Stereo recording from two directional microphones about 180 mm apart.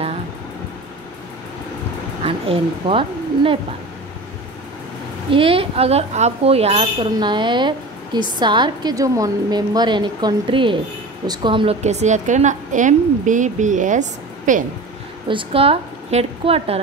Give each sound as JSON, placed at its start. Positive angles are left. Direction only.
{"t": 2.2, "sound": "speech", "side_deg": -30}
{"t": 5.3, "sound": "a woman's voice", "side_deg": -30}
{"t": 7.2, "sound": "a woman's voice", "side_deg": -25}
{"t": 11.8, "sound": "a woman's voice", "side_deg": -40}
{"t": 15.2, "sound": "a woman's voice", "side_deg": -30}